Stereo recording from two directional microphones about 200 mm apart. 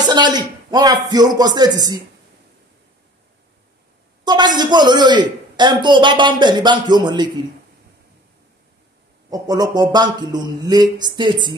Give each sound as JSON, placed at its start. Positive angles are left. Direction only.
{"t": 0.0, "sound": "a man's voice", "side_deg": -20}
{"t": 4.2, "sound": "a man's voice", "side_deg": -20}
{"t": 9.3, "sound": "a man's voice", "side_deg": -20}